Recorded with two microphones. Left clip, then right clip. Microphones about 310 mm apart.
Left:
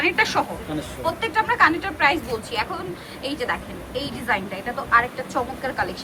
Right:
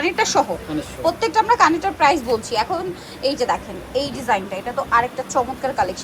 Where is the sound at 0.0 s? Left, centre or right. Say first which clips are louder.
Right 2 dB; centre.